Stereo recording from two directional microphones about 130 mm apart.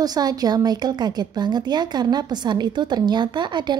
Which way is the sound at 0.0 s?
30° right (ahead or behind).